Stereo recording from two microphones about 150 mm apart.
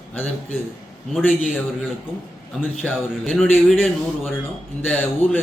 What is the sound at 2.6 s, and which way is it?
A man's voice, 5° left (ahead or behind).